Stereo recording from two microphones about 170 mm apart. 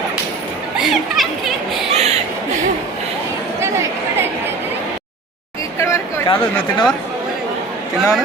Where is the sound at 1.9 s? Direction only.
40° right (ahead or behind).